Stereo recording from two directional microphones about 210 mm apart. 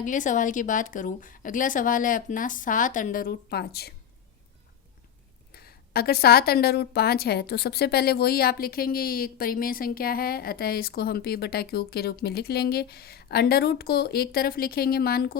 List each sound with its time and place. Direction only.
0.0 s a woman's voice: 35° left (ahead or behind)
5.5 s a woman's voice: 50° left (ahead or behind)